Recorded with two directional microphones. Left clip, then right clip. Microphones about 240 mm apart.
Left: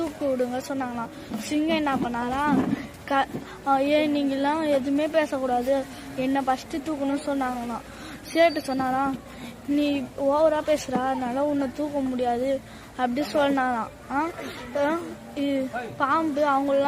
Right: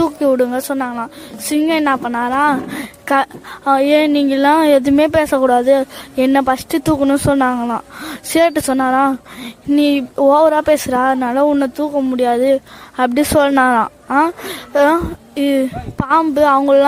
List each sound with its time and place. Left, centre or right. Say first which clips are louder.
0.0 s a woman's voice: right 12 dB; right